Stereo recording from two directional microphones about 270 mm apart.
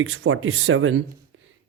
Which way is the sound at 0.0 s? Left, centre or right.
Right.